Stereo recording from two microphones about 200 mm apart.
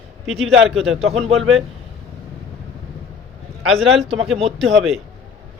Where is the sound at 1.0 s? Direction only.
30° right (ahead or behind).